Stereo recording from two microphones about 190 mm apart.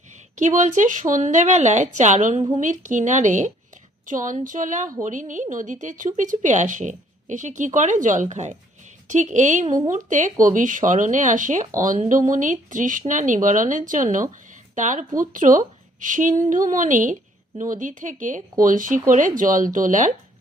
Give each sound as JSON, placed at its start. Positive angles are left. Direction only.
{"t": 0.3, "sound": "a woman's voice", "side_deg": -40}